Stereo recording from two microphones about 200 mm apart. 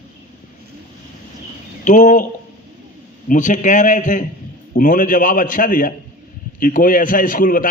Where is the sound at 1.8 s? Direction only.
40° left (ahead or behind).